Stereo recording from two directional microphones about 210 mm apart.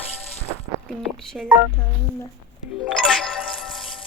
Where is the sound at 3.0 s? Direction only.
5° left (ahead or behind).